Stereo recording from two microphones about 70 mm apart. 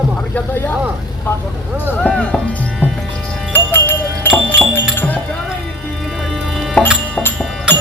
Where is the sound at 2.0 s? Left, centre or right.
Centre.